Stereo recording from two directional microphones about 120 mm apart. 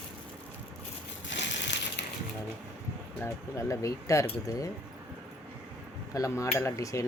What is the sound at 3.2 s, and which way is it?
Cutlery, 25° left (ahead or behind).